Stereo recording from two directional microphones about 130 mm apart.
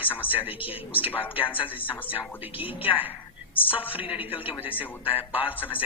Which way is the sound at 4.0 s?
10° right (ahead or behind).